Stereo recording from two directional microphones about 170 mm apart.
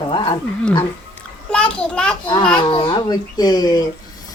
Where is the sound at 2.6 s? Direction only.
30° left (ahead or behind).